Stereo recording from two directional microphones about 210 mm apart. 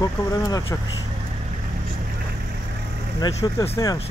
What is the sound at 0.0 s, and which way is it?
Speech, 15° left (ahead or behind).